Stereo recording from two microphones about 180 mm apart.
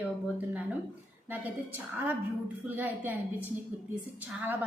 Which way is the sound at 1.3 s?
10° right (ahead or behind).